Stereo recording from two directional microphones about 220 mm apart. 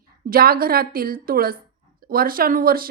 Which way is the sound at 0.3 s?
45° right (ahead or behind).